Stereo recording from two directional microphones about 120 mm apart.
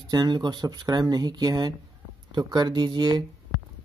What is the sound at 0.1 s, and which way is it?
Speech, 35° right (ahead or behind).